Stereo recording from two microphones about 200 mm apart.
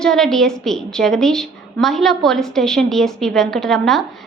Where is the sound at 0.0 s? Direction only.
Centre (ahead or behind).